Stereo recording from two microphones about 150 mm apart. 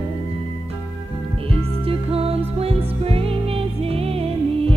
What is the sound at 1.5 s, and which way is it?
Music, 40° right (ahead or behind).